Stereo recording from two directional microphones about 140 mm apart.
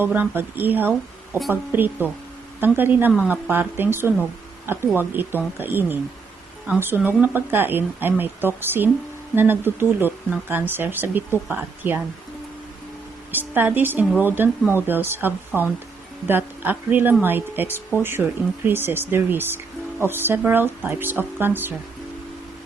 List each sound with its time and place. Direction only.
0.0 s speech: 15° right (ahead or behind)
13.3 s speech: 15° right (ahead or behind)